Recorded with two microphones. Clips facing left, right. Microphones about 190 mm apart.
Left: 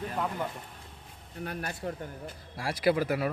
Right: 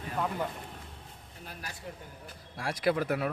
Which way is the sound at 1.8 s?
65° left (ahead or behind).